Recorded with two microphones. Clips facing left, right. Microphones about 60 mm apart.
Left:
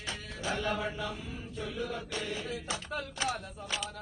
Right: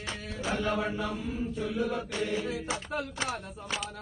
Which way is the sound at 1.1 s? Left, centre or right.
Centre.